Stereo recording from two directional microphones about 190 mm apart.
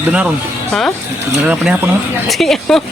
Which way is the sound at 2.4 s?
Centre (ahead or behind).